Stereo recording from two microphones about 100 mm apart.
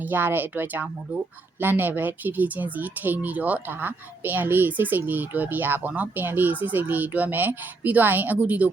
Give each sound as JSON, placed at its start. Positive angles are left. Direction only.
{"t": 0.0, "sound": "a woman's voice", "side_deg": -20}